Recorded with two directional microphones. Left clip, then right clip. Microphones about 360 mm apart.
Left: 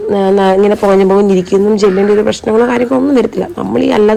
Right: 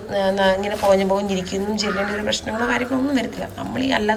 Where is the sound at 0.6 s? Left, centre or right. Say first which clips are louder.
Left 9 dB; centre.